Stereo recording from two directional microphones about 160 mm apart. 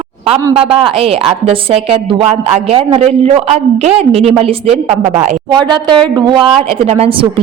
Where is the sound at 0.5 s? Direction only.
35° right (ahead or behind).